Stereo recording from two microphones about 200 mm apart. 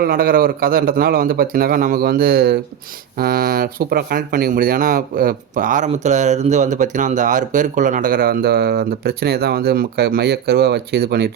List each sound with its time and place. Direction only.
0.0 s speech: 45° right (ahead or behind)